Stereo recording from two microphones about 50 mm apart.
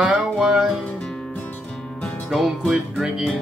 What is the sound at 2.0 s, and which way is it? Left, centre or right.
Music, centre.